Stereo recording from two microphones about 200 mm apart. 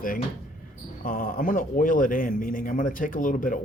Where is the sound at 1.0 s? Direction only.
45° left (ahead or behind).